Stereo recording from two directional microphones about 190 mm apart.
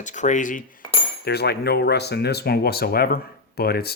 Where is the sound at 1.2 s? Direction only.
60° left (ahead or behind).